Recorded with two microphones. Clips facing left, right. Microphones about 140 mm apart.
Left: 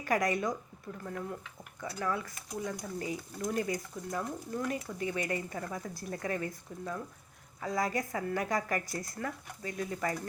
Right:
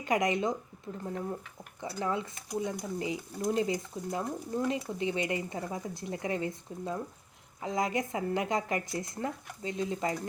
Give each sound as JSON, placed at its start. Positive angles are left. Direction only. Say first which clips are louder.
{"t": 0.0, "sound": "speech", "louder": "right 2 dB", "side_deg": -20}